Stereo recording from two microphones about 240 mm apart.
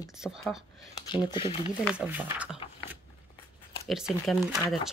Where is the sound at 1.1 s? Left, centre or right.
Centre.